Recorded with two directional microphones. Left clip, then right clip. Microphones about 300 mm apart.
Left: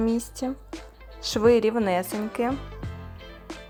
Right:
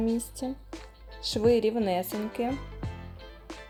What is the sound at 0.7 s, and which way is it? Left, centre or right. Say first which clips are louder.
Music: left 4 dB; centre.